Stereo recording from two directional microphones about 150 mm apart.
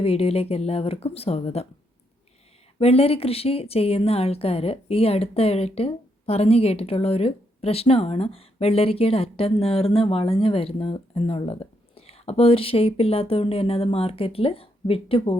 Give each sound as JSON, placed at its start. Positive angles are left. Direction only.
{"t": 0.0, "sound": "a woman's voice", "side_deg": 40}
{"t": 2.7, "sound": "a woman's voice", "side_deg": 40}